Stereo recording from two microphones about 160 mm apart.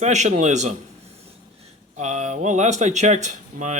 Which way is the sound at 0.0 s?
45° right (ahead or behind).